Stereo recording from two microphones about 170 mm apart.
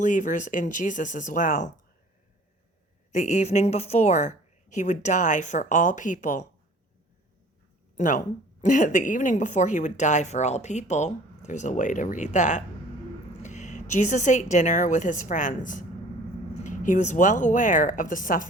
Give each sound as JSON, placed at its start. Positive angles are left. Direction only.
{"t": 0.0, "sound": "a woman's voice", "side_deg": 50}
{"t": 3.1, "sound": "a woman's voice", "side_deg": 45}
{"t": 7.9, "sound": "a woman's voice", "side_deg": 50}